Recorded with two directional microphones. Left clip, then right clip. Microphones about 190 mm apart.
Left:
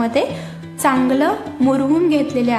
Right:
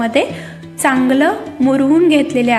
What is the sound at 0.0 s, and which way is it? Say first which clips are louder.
A woman's voice: right 3 dB; 5° right (ahead or behind).